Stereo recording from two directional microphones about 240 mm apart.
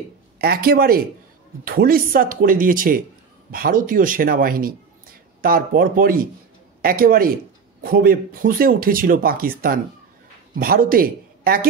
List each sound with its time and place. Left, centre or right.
0.4 s speech: right